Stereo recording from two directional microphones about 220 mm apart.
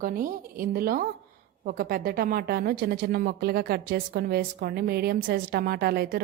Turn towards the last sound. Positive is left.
turn(degrees=-45)  # may be behind; listen again after turning